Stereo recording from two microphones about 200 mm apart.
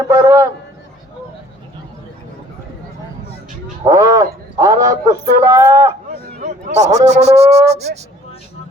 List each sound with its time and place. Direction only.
0.1 s a man's voice: 15° right (ahead or behind)
3.8 s a man's voice: 15° right (ahead or behind)
6.2 s speech: 35° right (ahead or behind)